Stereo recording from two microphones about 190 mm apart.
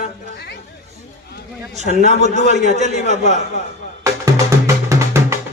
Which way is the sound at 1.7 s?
40° right (ahead or behind).